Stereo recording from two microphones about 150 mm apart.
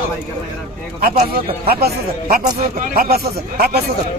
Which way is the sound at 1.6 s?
90° right.